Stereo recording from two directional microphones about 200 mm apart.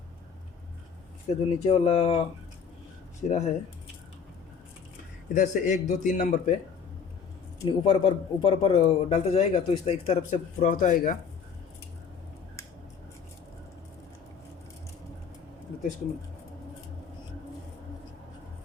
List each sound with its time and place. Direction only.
1.3 s speech: 35° left (ahead or behind)
3.2 s speech: 35° left (ahead or behind)
5.3 s speech: 40° left (ahead or behind)
7.6 s speech: 25° left (ahead or behind); by 11.2 s 45° left (ahead or behind)